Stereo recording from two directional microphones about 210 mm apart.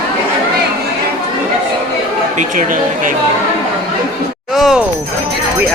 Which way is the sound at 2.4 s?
40° right (ahead or behind).